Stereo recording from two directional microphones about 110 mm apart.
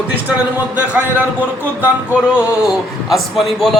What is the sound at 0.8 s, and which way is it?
Speech, 15° right (ahead or behind).